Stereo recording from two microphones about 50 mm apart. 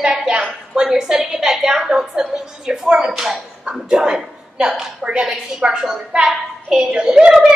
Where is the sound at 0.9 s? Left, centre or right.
Centre.